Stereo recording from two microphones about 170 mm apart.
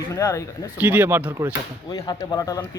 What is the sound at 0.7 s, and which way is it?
Speech, 10° right (ahead or behind).